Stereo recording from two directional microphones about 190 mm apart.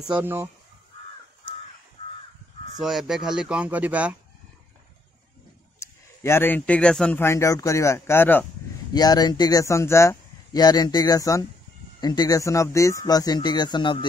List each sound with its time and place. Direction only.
0.0 s speech: 10° right (ahead or behind)
2.8 s speech: centre (ahead or behind)
5.8 s speech: 15° left (ahead or behind)
8.9 s speech: 20° left (ahead or behind)